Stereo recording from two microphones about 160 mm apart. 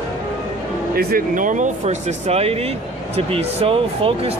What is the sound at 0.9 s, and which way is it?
Speech, 60° right (ahead or behind).